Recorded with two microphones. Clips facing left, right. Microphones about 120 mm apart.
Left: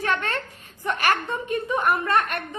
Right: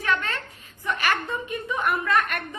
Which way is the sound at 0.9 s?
40° left (ahead or behind).